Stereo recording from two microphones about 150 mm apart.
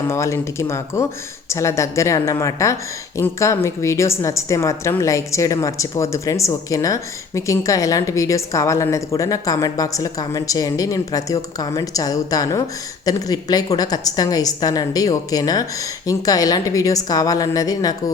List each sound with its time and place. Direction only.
0.1 s a woman's voice: 20° left (ahead or behind)